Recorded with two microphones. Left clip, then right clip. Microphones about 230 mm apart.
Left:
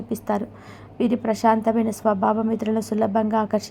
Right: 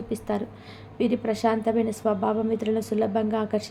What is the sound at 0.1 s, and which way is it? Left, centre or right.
Speech, centre.